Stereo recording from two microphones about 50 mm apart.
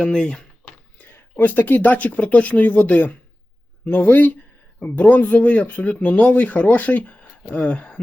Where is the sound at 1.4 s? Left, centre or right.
Left.